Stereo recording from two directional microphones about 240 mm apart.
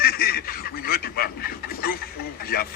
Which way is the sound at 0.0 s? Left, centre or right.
Left.